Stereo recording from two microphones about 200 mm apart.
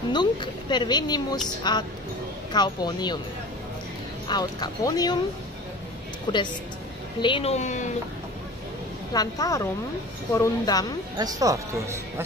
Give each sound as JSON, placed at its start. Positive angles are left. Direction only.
{"t": 0.1, "sound": "a woman's voice", "side_deg": 20}
{"t": 4.3, "sound": "a woman's voice", "side_deg": 20}
{"t": 6.3, "sound": "a woman's voice", "side_deg": 25}
{"t": 9.1, "sound": "a woman's voice", "side_deg": 20}
{"t": 11.1, "sound": "speech", "side_deg": -20}